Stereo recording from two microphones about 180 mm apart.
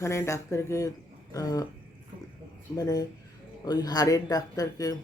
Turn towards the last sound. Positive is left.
turn(degrees=20)  # may be behind; listen again after turning